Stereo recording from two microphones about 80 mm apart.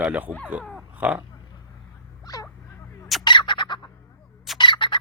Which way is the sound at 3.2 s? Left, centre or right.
Left.